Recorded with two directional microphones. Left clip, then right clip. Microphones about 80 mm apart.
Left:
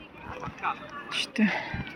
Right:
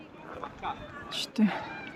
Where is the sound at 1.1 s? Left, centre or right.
Right.